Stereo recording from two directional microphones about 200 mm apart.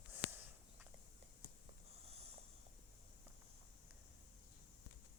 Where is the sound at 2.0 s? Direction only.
30° right (ahead or behind).